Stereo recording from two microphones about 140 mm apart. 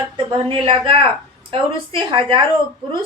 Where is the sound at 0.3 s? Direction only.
35° right (ahead or behind).